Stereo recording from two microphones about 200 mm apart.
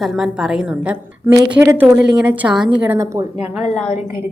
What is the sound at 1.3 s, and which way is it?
A woman's voice, 20° right (ahead or behind).